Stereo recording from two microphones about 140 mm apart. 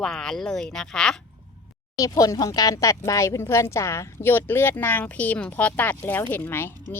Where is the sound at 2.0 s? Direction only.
25° left (ahead or behind).